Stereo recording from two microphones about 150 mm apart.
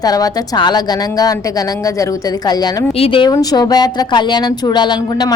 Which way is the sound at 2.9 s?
40° left (ahead or behind).